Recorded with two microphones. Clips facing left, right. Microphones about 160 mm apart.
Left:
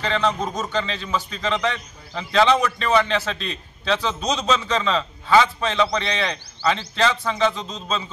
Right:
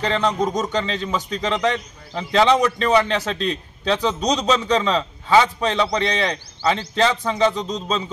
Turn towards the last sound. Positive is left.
turn(degrees=-15)  # may be behind; listen again after turning